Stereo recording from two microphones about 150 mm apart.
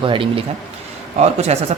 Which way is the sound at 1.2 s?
45° right (ahead or behind).